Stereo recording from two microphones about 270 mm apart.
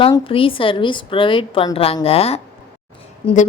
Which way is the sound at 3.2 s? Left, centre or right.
Left.